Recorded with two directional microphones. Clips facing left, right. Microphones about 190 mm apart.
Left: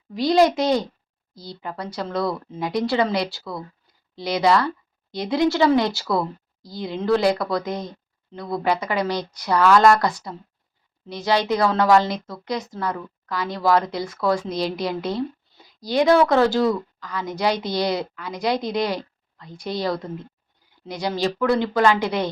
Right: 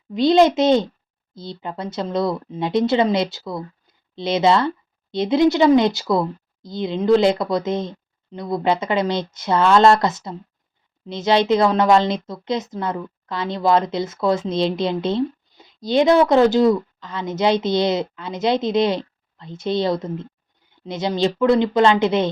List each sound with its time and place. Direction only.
0.1 s a woman's voice: 25° right (ahead or behind)